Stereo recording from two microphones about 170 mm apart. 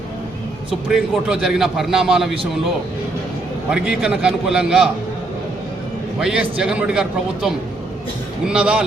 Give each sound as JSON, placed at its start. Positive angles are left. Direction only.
{"t": 0.9, "sound": "a man's voice", "side_deg": -5}
{"t": 3.7, "sound": "a man's voice", "side_deg": -5}
{"t": 6.1, "sound": "a man's voice", "side_deg": -5}